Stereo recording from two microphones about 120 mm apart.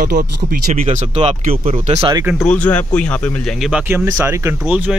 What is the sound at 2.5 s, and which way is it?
Speech, 10° left (ahead or behind).